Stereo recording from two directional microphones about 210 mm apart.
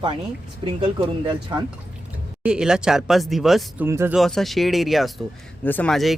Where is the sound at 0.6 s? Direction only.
25° right (ahead or behind).